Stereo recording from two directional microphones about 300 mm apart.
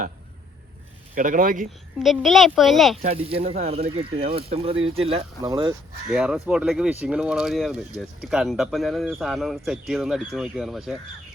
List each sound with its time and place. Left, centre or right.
1.1 s speech: right
2.0 s speech: centre
3.0 s speech: centre
6.1 s speech: centre